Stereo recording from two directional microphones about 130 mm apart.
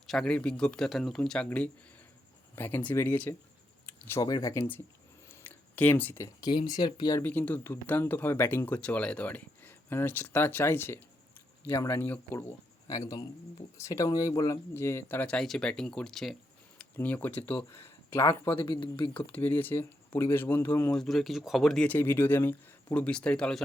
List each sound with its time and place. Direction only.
0.1 s speech: 5° left (ahead or behind)
4.2 s speech: 30° left (ahead or behind)
5.3 s a sound: 15° left (ahead or behind)
6.2 s speech: 35° left (ahead or behind)
7.2 s speech: 15° left (ahead or behind)
17.0 s speech: 15° left (ahead or behind)
18.6 s speech: 35° left (ahead or behind)
19.1 s speech: 10° left (ahead or behind)
20.9 s speech: 5° left (ahead or behind)
21.8 s speech: 15° left (ahead or behind)